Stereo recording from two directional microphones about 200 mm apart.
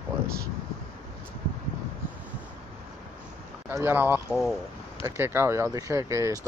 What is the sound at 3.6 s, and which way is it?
Speech, 10° right (ahead or behind).